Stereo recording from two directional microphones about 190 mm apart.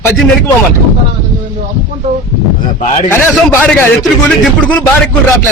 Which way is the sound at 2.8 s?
35° left (ahead or behind).